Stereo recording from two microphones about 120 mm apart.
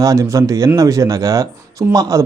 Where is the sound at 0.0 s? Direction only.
25° right (ahead or behind).